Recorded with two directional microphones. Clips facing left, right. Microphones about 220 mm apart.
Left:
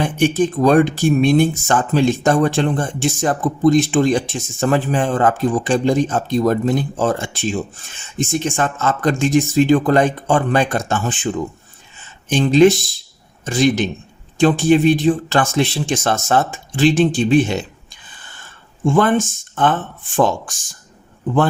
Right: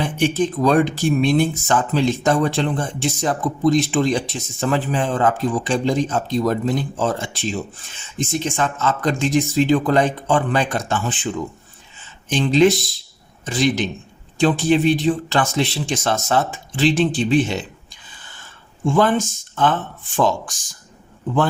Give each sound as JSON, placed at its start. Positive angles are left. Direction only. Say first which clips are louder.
{"t": 0.0, "sound": "speech", "louder": "left 3 dB", "side_deg": 50}
{"t": 12.3, "sound": "speech", "louder": "left 3 dB", "side_deg": 45}
{"t": 18.9, "sound": "speech", "louder": "left 2 dB", "side_deg": 50}